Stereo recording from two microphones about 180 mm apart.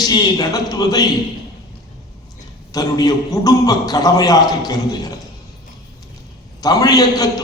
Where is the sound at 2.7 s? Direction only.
20° left (ahead or behind).